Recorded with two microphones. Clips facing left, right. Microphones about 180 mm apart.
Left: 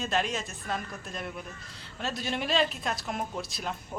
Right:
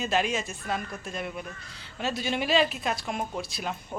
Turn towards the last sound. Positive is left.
turn(degrees=-5)  # may be behind; listen again after turning